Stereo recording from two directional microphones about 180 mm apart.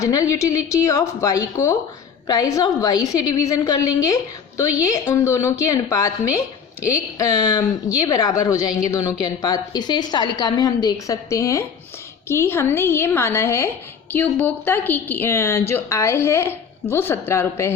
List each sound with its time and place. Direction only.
0.0 s a woman's voice: 20° left (ahead or behind)